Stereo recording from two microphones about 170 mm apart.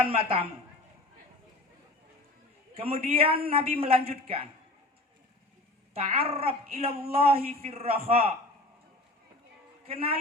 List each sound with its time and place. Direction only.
0.0 s a woman's voice: 30° right (ahead or behind)
2.7 s a woman's voice: 35° right (ahead or behind)
5.9 s a woman's voice: 35° right (ahead or behind)
9.8 s a woman's voice: 35° right (ahead or behind)